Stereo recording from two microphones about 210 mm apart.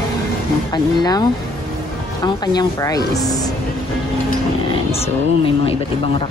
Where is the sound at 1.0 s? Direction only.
20° left (ahead or behind).